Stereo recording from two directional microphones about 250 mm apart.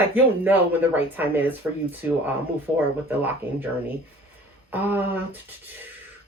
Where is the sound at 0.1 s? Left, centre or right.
Centre.